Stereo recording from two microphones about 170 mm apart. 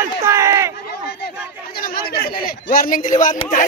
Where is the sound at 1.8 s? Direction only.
60° left (ahead or behind).